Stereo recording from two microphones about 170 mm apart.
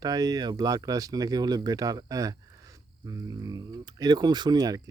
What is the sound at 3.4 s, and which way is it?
Speech, 20° right (ahead or behind).